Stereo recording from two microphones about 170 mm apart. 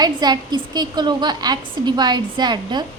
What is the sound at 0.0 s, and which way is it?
A woman's voice, 25° right (ahead or behind).